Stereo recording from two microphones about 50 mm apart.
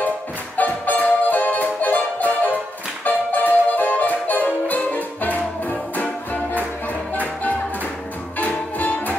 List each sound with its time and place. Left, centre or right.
0.6 s music: left
8.4 s music: left